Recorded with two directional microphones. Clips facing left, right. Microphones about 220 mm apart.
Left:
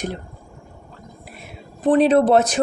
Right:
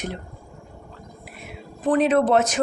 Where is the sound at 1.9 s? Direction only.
35° left (ahead or behind).